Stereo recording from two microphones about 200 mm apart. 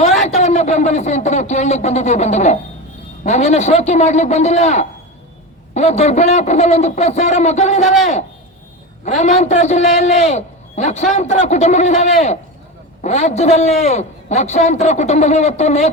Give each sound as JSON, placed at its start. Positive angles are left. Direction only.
{"t": 0.3, "sound": "a man's voice", "side_deg": 35}
{"t": 9.0, "sound": "a man's voice", "side_deg": 35}